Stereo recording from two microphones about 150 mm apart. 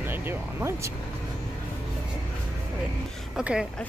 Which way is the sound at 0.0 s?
15° right (ahead or behind).